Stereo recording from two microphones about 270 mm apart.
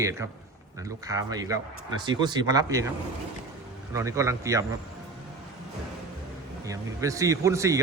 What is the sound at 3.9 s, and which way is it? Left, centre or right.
Speech, centre.